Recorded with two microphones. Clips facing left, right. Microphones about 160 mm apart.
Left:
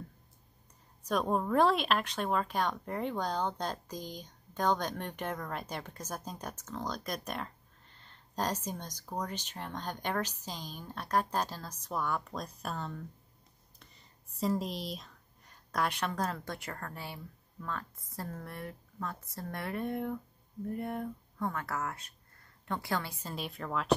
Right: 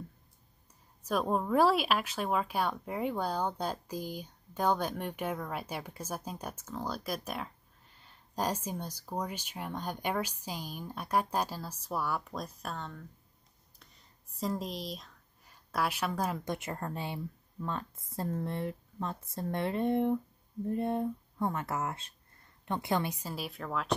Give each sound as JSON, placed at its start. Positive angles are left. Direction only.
{"t": 1.0, "sound": "speech", "side_deg": -5}
{"t": 23.2, "sound": "a woman's voice", "side_deg": -5}